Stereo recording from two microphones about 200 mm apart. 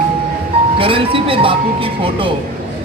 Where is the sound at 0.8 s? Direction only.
25° right (ahead or behind).